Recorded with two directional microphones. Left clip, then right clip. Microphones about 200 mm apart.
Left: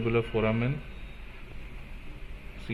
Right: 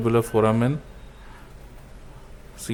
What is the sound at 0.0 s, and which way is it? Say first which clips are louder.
Speech: right 7 dB; 75° right (ahead or behind).